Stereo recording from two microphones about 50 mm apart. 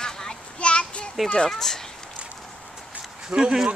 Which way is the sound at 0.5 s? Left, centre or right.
Left.